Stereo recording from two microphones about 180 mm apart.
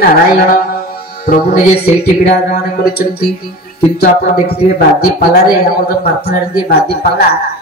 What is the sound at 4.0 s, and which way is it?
Speech, 60° left (ahead or behind).